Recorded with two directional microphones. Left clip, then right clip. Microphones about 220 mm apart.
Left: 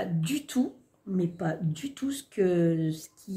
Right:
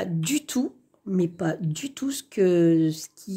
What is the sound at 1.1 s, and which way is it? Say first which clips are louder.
Speech: right 5 dB; 45° right (ahead or behind).